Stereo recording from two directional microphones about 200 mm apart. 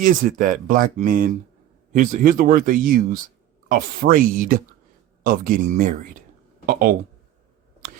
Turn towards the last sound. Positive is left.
turn(degrees=-45)  # may be behind; listen again after turning